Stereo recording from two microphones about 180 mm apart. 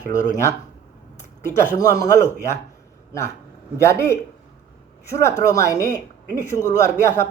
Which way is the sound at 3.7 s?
15° left (ahead or behind).